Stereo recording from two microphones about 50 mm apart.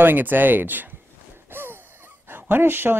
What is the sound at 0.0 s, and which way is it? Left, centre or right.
Speech, right.